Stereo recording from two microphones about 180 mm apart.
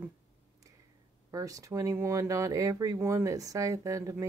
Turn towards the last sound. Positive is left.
turn(degrees=-20)  # may be behind; listen again after turning